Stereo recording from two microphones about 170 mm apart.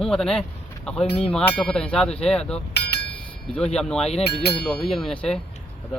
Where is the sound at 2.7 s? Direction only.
70° left (ahead or behind).